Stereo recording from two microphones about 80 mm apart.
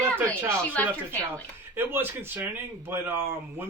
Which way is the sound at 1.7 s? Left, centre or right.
Right.